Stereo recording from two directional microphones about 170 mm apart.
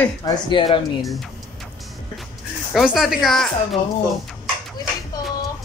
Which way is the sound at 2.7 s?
Centre (ahead or behind).